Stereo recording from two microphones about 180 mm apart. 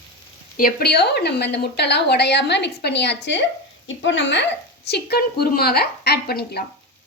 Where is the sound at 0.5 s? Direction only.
55° left (ahead or behind); by 3.4 s 75° left (ahead or behind).